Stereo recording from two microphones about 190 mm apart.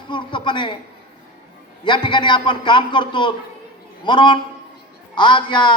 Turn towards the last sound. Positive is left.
turn(degrees=25)  # may be behind; listen again after turning